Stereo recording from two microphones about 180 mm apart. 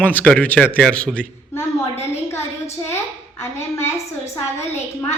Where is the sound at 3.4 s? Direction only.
15° left (ahead or behind).